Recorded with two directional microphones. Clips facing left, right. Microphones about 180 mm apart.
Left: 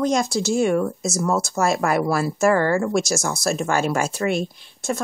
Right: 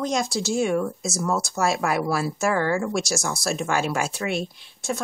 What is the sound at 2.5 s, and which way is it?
Speech, 50° left (ahead or behind).